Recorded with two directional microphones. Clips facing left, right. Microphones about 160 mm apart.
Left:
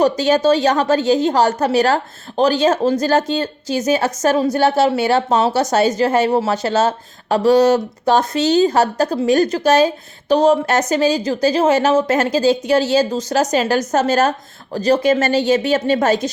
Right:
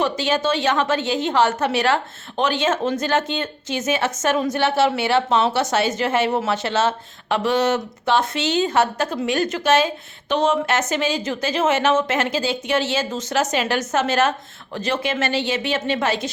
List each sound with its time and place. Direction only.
0.0 s a woman's voice: 40° left (ahead or behind)